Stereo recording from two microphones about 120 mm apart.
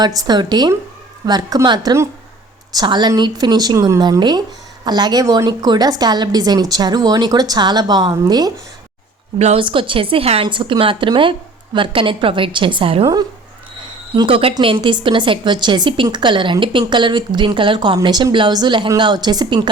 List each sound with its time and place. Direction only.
0.0 s a woman's voice: 35° right (ahead or behind)
9.6 s a woman's voice: 45° right (ahead or behind)
14.2 s a woman's voice: 45° right (ahead or behind)